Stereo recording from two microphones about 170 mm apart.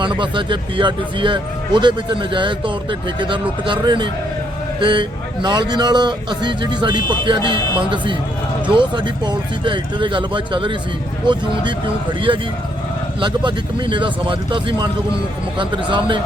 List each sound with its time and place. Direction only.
0.0 s speech: 30° right (ahead or behind)
13.1 s speech: 30° right (ahead or behind)